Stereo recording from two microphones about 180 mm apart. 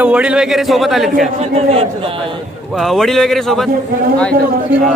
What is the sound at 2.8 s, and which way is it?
Speech, centre (ahead or behind).